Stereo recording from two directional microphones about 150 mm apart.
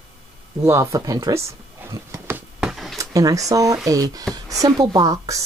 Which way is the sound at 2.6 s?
Centre (ahead or behind).